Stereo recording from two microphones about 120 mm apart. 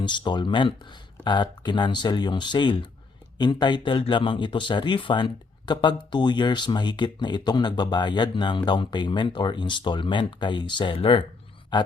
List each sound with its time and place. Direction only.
0.0 s speech: 40° left (ahead or behind)